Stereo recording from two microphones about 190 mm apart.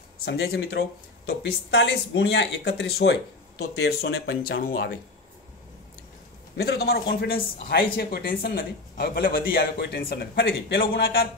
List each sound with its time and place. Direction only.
0.2 s speech: 60° left (ahead or behind)
6.5 s speech: 60° left (ahead or behind)